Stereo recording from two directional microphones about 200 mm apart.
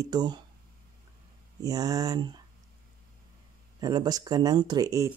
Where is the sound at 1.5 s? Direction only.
20° right (ahead or behind).